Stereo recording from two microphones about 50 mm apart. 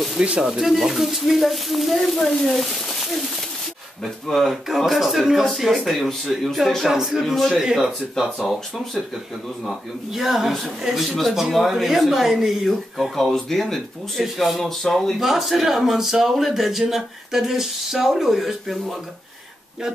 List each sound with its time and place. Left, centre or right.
0.2 s speech: centre
0.6 s speech: centre
10.1 s speech: centre
11.1 s speech: centre